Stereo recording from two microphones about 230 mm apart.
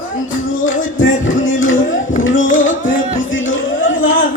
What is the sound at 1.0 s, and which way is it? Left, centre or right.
Music, left.